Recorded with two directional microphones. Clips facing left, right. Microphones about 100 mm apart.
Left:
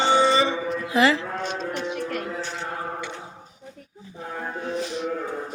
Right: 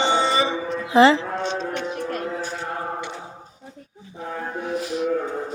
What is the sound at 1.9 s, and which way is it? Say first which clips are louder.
Music: right 1 dB; 35° right (ahead or behind).